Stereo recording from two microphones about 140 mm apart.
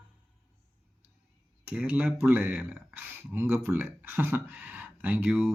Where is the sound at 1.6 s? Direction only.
10° right (ahead or behind).